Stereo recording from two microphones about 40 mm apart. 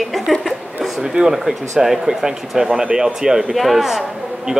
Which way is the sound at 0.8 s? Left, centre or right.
Centre.